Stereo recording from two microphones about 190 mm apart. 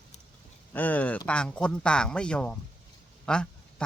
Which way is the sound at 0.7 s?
10° left (ahead or behind).